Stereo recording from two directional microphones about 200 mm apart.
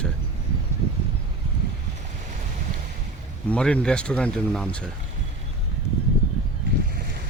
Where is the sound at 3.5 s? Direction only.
5° left (ahead or behind).